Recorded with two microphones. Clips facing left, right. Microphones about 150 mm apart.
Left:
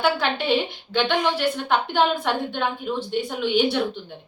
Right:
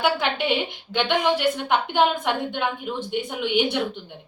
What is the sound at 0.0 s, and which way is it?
Speech, 15° right (ahead or behind).